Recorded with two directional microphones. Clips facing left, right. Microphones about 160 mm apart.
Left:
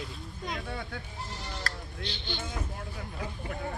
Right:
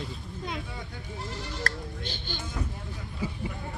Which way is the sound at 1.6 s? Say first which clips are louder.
Right 4 dB; 45° right (ahead or behind).